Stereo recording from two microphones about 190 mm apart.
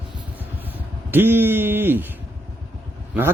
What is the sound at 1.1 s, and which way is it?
Speech, 10° right (ahead or behind).